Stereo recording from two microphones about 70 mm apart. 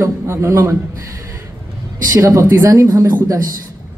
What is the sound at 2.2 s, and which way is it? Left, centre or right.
Speech, right.